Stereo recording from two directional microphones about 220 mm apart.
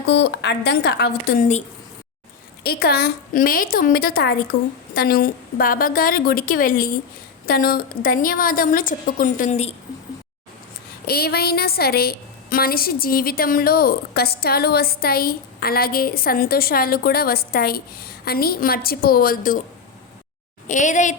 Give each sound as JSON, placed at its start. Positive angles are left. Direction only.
{"t": 0.1, "sound": "a woman's voice", "side_deg": 50}
{"t": 2.6, "sound": "a woman's voice", "side_deg": 45}
{"t": 11.0, "sound": "a woman's voice", "side_deg": 45}
{"t": 20.7, "sound": "a woman's voice", "side_deg": 35}